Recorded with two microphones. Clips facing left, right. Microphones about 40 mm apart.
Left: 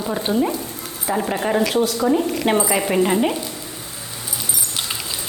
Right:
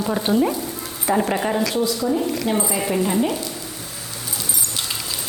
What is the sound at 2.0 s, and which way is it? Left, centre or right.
Speech, left.